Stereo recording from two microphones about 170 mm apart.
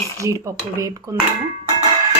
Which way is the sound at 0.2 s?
20° right (ahead or behind).